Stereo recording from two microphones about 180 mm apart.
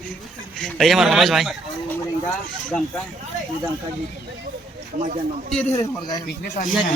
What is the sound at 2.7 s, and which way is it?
Speech, 5° left (ahead or behind).